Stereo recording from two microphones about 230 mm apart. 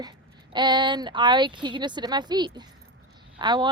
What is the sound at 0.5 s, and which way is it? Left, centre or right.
Speech, centre.